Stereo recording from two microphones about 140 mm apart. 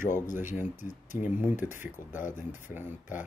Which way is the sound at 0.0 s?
65° left (ahead or behind).